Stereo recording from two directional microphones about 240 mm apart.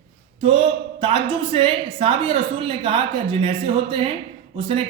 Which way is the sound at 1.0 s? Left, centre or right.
Right.